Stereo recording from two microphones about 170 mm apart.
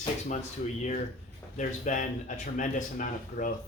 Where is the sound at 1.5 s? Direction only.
45° left (ahead or behind).